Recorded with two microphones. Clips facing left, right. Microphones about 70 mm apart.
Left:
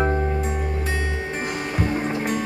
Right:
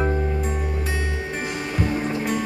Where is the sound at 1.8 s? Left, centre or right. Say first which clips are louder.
Even; left.